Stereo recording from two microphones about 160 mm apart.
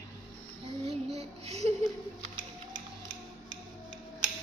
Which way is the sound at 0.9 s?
40° right (ahead or behind).